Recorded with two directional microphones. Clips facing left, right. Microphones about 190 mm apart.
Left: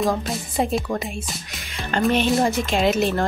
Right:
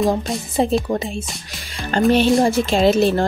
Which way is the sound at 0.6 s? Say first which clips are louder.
Right 4 dB; 30° right (ahead or behind).